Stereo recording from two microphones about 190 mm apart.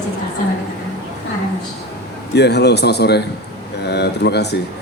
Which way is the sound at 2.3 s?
60° left (ahead or behind).